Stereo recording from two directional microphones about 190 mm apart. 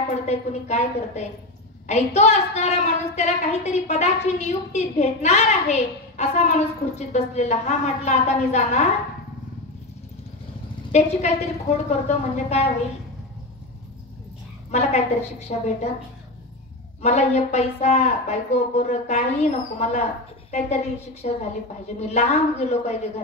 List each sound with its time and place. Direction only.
0.3 s a woman's voice: 35° left (ahead or behind)
10.9 s a woman's voice: 35° left (ahead or behind)
14.7 s a woman's voice: 35° left (ahead or behind)
17.0 s a woman's voice: 35° left (ahead or behind)